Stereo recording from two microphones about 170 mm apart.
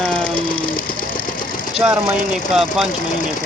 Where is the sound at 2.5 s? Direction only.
Centre (ahead or behind).